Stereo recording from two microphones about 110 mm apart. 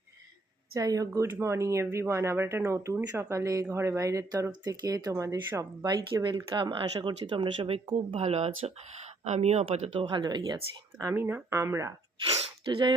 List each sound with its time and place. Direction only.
0.7 s speech: 30° right (ahead or behind); by 8.7 s 70° right (ahead or behind)
9.2 s speech: 85° right; by 11.1 s 35° right (ahead or behind)
11.1 s speech: 20° right (ahead or behind)
12.4 s sneeze: 50° right (ahead or behind)